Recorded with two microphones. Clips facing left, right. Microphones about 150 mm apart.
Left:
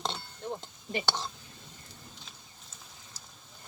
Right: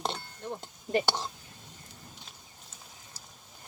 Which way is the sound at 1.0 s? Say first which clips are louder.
Right 2 dB; 15° right (ahead or behind).